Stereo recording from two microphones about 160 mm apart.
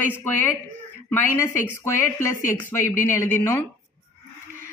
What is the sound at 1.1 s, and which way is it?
A woman's voice, 15° left (ahead or behind).